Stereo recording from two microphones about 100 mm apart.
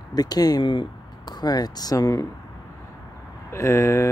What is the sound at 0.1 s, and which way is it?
Speech, 40° left (ahead or behind).